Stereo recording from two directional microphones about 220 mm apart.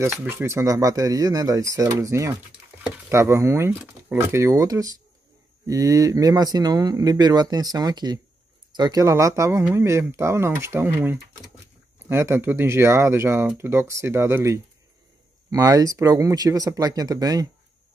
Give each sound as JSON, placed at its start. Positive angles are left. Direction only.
{"t": 0.0, "sound": "speech", "side_deg": -10}